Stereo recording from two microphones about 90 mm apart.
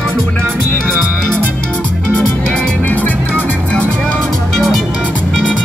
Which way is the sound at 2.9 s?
20° left (ahead or behind).